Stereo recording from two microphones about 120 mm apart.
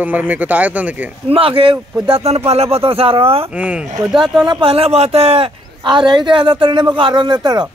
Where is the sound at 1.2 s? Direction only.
50° right (ahead or behind).